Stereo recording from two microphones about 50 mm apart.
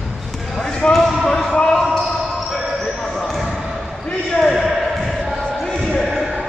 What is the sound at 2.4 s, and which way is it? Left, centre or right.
Basketball bounce, centre.